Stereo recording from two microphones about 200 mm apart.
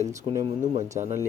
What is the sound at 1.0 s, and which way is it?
Speech, 30° right (ahead or behind).